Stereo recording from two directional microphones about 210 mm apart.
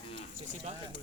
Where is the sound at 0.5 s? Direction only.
30° right (ahead or behind).